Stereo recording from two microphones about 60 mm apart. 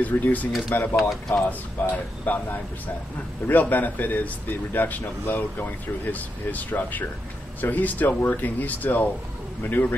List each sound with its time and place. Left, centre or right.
0.0 s speech: left